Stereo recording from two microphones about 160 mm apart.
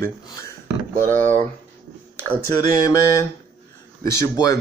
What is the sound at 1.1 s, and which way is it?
Speech, 50° right (ahead or behind).